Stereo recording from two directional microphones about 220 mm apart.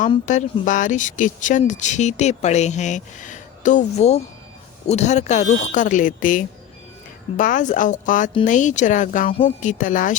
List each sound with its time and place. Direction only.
0.3 s speech: 35° left (ahead or behind)